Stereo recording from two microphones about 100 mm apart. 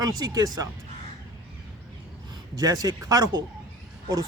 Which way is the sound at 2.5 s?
35° right (ahead or behind).